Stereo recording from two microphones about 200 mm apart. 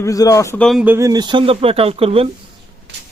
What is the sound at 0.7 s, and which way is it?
Speech, 5° right (ahead or behind).